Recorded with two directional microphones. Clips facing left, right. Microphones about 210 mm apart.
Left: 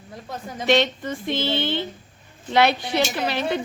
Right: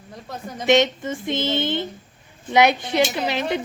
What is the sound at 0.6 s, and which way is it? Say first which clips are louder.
A woman's voice: right 2 dB; 20° right (ahead or behind).